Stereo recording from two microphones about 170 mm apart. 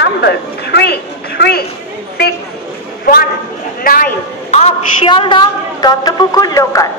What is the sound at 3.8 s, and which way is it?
Speech, 55° left (ahead or behind).